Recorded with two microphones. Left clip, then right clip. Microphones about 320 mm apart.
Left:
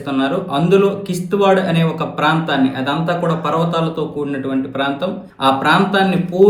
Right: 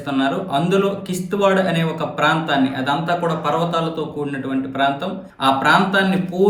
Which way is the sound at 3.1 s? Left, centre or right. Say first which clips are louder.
Left 2 dB; right.